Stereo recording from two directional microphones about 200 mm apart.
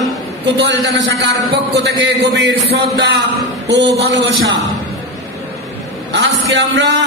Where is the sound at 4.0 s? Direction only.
60° right (ahead or behind).